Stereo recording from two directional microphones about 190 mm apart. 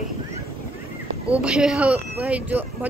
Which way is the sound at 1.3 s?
5° right (ahead or behind).